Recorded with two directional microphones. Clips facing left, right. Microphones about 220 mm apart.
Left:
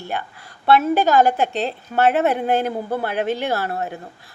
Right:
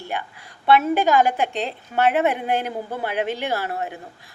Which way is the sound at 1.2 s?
15° right (ahead or behind).